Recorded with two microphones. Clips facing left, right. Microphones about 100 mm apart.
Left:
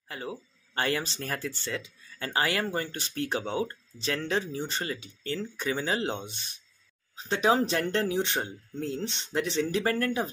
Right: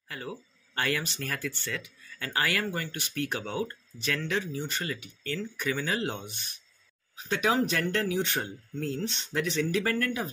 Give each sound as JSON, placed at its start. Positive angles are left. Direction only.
{"t": 0.1, "sound": "speech", "side_deg": 25}